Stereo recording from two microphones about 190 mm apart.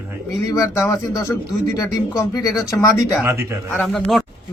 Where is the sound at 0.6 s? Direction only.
15° left (ahead or behind).